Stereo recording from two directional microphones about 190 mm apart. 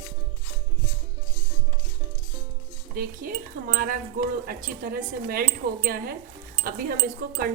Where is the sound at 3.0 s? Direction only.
50° right (ahead or behind).